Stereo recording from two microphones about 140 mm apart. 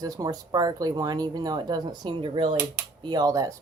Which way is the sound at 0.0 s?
25° right (ahead or behind).